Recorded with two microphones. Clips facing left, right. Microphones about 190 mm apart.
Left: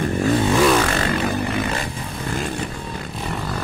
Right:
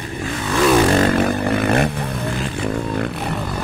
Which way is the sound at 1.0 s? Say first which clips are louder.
Right 5 dB; 55° right (ahead or behind).